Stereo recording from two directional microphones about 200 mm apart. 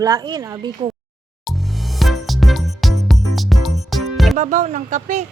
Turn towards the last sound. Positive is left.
turn(degrees=-35)  # may be behind; listen again after turning